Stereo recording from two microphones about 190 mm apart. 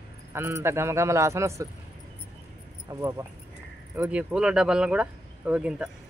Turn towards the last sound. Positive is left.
turn(degrees=-5)  # may be behind; listen again after turning